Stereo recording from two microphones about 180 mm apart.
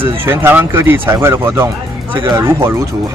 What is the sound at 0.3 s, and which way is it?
Speech, 10° right (ahead or behind).